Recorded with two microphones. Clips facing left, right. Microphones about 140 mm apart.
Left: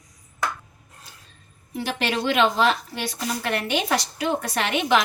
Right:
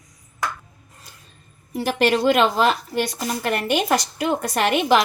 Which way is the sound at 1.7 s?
40° right (ahead or behind).